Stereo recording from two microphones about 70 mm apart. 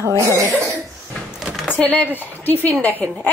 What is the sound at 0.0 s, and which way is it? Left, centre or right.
Cough, right.